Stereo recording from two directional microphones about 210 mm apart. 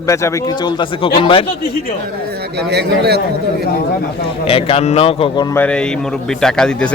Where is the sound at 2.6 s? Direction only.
50° right (ahead or behind).